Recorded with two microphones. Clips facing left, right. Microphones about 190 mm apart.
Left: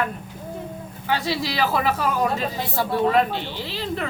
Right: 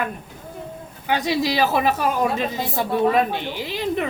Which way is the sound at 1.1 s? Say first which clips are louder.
Right 3 dB; 20° right (ahead or behind).